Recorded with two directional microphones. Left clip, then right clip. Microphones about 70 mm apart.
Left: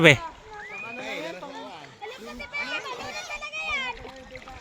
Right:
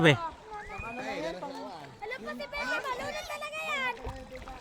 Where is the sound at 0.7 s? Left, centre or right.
Centre.